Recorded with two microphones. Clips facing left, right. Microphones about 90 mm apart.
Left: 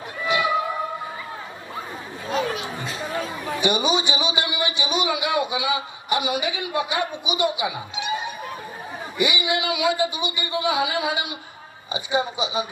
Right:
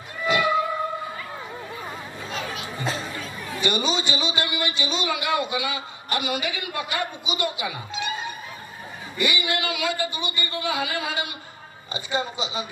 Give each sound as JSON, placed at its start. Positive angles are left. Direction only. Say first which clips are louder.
{"t": 3.6, "sound": "a man's voice", "louder": "left 3 dB", "side_deg": 15}